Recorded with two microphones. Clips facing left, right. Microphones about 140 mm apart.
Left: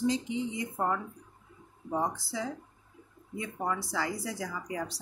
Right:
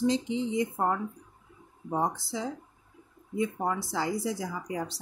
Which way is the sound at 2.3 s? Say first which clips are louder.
Right 1 dB; 25° right (ahead or behind).